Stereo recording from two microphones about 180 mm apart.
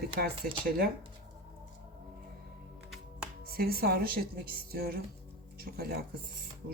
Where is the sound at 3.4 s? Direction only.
55° right (ahead or behind).